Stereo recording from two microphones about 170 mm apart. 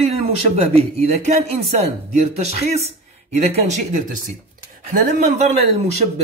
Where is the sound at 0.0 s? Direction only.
40° right (ahead or behind).